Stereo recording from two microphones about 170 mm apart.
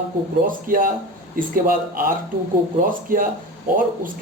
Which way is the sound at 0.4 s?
55° right (ahead or behind).